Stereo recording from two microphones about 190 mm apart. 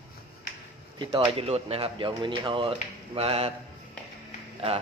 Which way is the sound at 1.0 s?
25° right (ahead or behind).